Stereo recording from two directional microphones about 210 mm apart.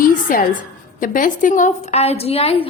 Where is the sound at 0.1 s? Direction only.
40° left (ahead or behind).